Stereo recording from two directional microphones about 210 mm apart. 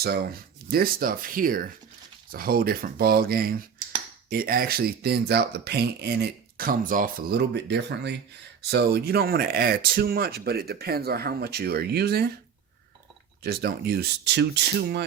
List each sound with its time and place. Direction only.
0.0 s speech: 45° right (ahead or behind)
13.4 s speech: 50° right (ahead or behind)